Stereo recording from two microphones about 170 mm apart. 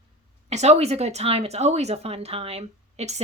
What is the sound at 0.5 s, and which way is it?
A woman's voice, 40° right (ahead or behind).